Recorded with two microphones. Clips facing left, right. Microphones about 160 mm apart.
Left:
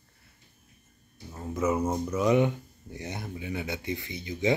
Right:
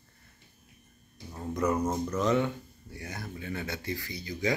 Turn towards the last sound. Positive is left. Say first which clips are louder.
# left 4 dB
turn(degrees=20)  # may be behind; listen again after turning